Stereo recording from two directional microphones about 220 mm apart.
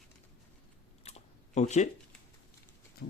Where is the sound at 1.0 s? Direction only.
30° left (ahead or behind).